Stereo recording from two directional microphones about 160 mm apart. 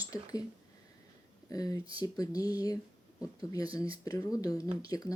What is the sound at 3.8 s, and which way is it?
Speech, 20° left (ahead or behind).